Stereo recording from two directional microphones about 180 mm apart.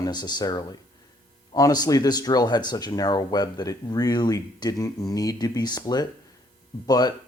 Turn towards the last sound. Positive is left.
turn(degrees=20)  # may be behind; listen again after turning